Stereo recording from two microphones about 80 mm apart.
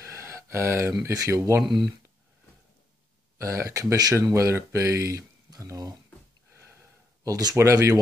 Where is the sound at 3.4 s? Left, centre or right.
Right.